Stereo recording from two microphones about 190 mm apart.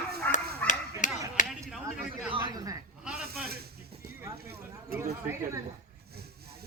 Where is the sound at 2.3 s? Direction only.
20° right (ahead or behind).